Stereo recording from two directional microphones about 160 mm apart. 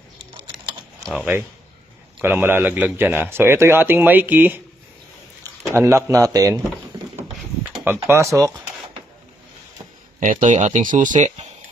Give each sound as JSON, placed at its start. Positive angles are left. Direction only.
{"t": 1.0, "sound": "speech", "side_deg": 0}
{"t": 2.2, "sound": "a man's voice", "side_deg": -15}
{"t": 5.7, "sound": "speech", "side_deg": -20}
{"t": 7.7, "sound": "speech", "side_deg": -15}
{"t": 10.2, "sound": "speech", "side_deg": -55}